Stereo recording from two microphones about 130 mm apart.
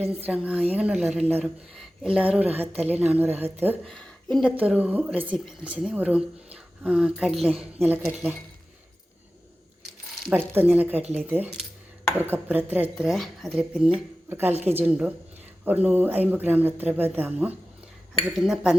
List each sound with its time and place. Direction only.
0.0 s a woman's voice: 50° right (ahead or behind)
0.3 s speech: 10° right (ahead or behind)
3.8 s speech: 5° left (ahead or behind)
4.6 s speech: 10° right (ahead or behind)
10.2 s speech: 15° right (ahead or behind)
13.1 s speech: centre (ahead or behind)
14.3 s a woman's voice: 15° right (ahead or behind)